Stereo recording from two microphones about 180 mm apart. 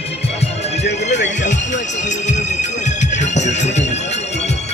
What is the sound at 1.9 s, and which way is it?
Music, 40° left (ahead or behind).